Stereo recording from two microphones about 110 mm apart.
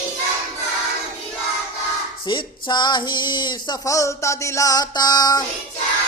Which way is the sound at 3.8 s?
30° left (ahead or behind).